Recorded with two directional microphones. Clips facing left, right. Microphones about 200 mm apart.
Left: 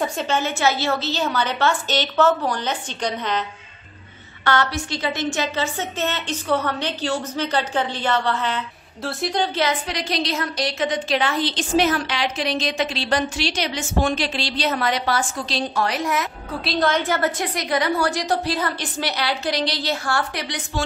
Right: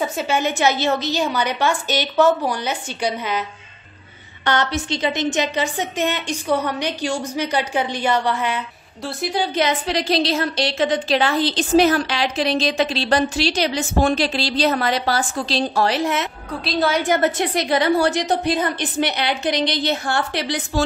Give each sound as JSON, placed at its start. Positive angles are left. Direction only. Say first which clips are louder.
{"t": 0.0, "sound": "a woman's voice", "louder": "right 2 dB", "side_deg": -10}
{"t": 4.5, "sound": "a woman's voice", "louder": "right 1 dB", "side_deg": -20}
{"t": 9.8, "sound": "a woman's voice", "louder": "right 5 dB", "side_deg": -30}
{"t": 16.6, "sound": "a woman's voice", "louder": "right 2 dB", "side_deg": -10}